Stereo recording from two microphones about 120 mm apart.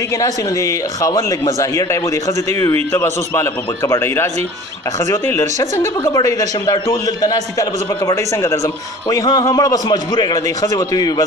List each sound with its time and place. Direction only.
1.0 s speech: 30° left (ahead or behind)
2.9 s a man's voice: 20° left (ahead or behind)